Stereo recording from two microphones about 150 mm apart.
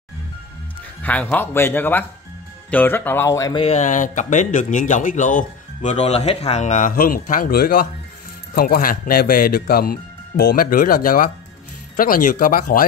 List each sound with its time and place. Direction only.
1.0 s speech: 10° left (ahead or behind)
3.5 s speech: 45° left (ahead or behind); by 12.8 s 70° left (ahead or behind)